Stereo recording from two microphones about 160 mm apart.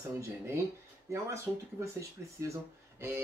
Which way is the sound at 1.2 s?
20° right (ahead or behind).